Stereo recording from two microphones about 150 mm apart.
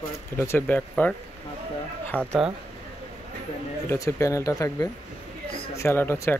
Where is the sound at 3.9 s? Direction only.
20° left (ahead or behind).